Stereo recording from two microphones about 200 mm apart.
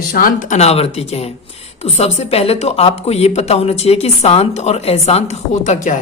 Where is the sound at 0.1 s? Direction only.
45° left (ahead or behind).